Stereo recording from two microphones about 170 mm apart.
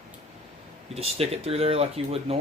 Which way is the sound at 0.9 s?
35° right (ahead or behind).